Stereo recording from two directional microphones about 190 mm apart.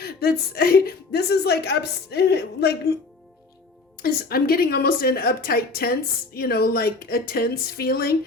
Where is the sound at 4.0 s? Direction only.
50° left (ahead or behind).